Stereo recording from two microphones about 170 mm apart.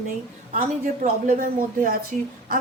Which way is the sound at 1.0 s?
50° right (ahead or behind).